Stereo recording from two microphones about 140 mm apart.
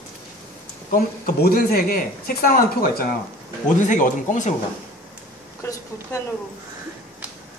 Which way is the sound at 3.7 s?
65° left (ahead or behind).